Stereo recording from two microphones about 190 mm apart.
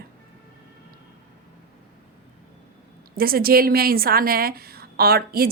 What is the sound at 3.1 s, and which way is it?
A woman's voice, 50° right (ahead or behind).